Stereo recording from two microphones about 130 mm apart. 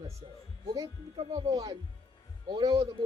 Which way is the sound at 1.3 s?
25° right (ahead or behind).